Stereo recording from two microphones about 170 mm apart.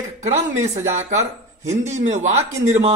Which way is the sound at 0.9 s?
15° right (ahead or behind).